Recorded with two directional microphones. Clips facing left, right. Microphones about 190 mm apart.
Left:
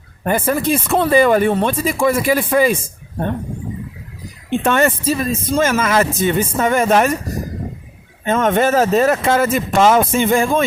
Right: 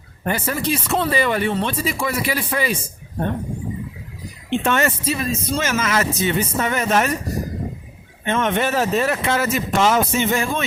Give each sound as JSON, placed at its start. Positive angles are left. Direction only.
{"t": 0.3, "sound": "speech", "side_deg": 50}
{"t": 4.4, "sound": "speech", "side_deg": 50}
{"t": 8.2, "sound": "speech", "side_deg": 40}